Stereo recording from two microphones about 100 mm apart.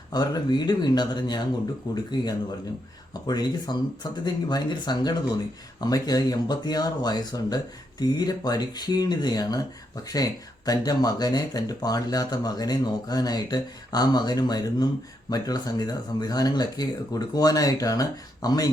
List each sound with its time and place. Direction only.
0.1 s speech: 45° left (ahead or behind)
3.2 s speech: 45° left (ahead or behind)